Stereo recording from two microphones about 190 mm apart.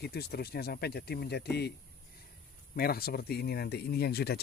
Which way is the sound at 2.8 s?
55° left (ahead or behind).